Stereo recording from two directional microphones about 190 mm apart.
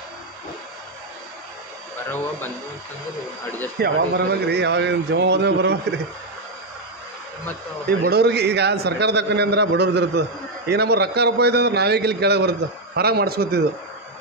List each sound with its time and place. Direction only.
3.8 s a man's voice: 60° right (ahead or behind)
8.0 s a man's voice: 60° right (ahead or behind)